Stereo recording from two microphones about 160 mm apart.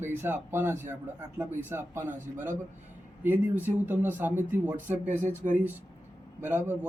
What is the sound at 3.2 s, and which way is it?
Speech, 10° right (ahead or behind).